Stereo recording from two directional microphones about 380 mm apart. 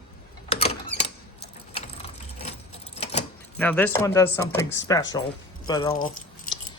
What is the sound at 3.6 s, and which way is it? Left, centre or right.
Speech, centre.